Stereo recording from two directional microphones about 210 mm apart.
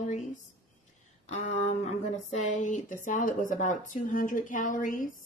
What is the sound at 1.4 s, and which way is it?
Speech, 30° left (ahead or behind).